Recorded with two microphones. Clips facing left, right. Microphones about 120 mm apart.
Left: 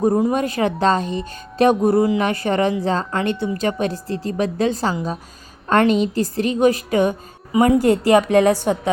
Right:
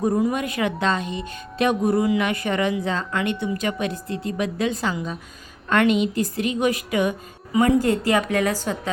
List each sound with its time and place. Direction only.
0.0 s speech: 30° left (ahead or behind)